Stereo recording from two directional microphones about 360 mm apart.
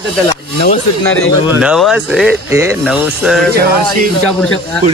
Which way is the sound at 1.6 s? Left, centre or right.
Centre.